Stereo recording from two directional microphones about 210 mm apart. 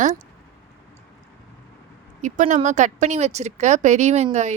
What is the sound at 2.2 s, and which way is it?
Speech, 35° right (ahead or behind).